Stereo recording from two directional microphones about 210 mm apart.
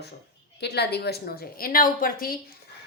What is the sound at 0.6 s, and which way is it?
A woman's voice, 50° left (ahead or behind).